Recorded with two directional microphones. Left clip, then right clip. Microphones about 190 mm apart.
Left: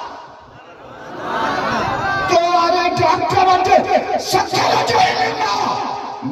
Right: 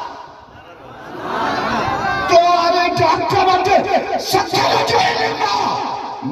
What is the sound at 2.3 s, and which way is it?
Music, 65° left (ahead or behind).